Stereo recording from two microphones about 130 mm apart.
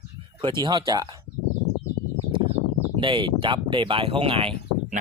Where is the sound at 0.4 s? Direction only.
35° right (ahead or behind).